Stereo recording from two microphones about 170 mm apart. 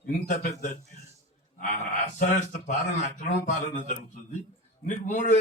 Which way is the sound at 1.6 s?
45° left (ahead or behind).